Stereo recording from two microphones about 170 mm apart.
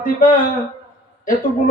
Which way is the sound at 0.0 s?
55° left (ahead or behind).